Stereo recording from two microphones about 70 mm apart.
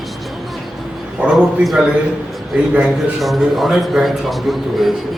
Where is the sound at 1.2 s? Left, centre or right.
Centre.